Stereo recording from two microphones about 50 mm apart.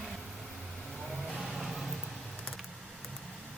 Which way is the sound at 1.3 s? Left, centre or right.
Centre.